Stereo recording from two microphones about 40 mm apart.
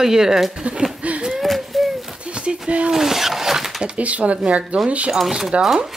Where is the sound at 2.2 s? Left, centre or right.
Right.